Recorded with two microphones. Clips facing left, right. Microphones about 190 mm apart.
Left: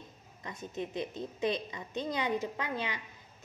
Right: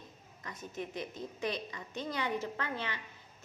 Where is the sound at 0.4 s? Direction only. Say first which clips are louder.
Left 3 dB; 25° left (ahead or behind).